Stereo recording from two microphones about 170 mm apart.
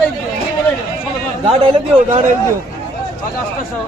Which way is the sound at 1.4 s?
35° right (ahead or behind).